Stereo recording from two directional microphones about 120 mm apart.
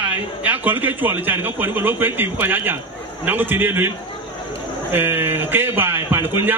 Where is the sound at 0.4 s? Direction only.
15° right (ahead or behind).